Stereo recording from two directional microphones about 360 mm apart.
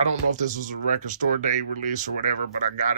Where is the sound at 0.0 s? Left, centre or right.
Centre.